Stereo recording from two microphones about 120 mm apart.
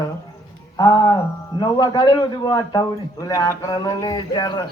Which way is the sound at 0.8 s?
30° left (ahead or behind).